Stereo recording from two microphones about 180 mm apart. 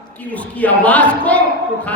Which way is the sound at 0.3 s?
10° left (ahead or behind).